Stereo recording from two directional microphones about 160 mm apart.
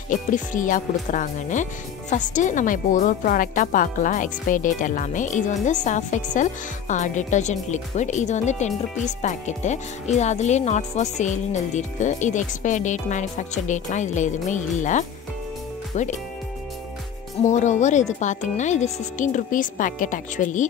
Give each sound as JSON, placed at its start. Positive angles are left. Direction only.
{"t": 0.1, "sound": "speech", "side_deg": 55}
{"t": 17.5, "sound": "speech", "side_deg": 50}